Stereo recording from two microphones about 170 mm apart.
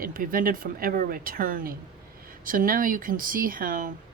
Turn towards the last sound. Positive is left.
turn(degrees=-55)  # may be behind; listen again after turning